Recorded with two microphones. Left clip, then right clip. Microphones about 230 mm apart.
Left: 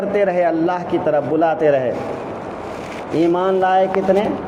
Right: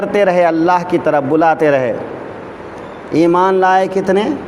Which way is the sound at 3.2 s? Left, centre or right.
Right.